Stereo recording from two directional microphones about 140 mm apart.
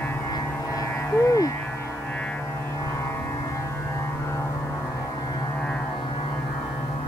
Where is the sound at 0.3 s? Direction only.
25° left (ahead or behind).